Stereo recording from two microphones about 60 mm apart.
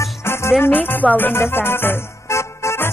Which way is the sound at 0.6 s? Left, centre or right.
Left.